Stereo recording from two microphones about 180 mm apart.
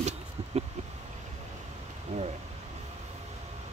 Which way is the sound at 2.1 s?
35° right (ahead or behind).